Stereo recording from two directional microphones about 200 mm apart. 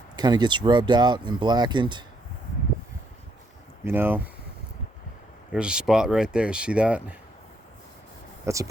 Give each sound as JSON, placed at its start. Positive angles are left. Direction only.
{"t": 0.2, "sound": "speech", "side_deg": -20}
{"t": 3.8, "sound": "speech", "side_deg": -10}
{"t": 5.5, "sound": "speech", "side_deg": -5}
{"t": 8.5, "sound": "speech", "side_deg": -15}